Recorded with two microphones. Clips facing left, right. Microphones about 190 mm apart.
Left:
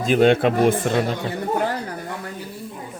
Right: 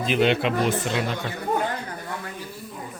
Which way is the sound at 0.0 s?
45° left (ahead or behind).